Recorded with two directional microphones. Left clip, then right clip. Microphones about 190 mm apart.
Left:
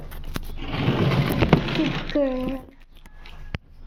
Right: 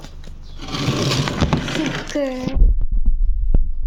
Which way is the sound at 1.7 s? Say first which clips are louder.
Right 2 dB; 60° right (ahead or behind).